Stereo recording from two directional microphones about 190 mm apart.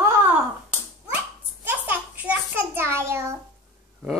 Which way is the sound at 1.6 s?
10° right (ahead or behind).